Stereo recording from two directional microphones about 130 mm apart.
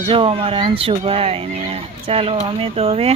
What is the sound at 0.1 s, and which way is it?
Speech, 45° right (ahead or behind).